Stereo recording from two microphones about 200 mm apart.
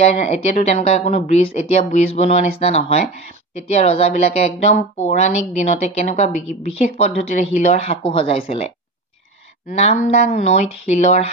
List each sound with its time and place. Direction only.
0.0 s a woman's voice: 30° left (ahead or behind)